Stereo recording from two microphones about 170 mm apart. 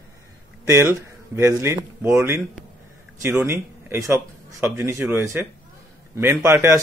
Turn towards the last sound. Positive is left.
turn(degrees=-15)  # may be behind; listen again after turning